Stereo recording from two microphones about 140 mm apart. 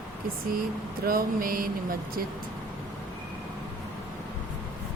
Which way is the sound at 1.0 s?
90° right.